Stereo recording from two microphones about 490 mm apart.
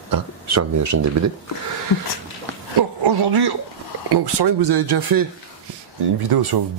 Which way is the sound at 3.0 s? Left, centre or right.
Right.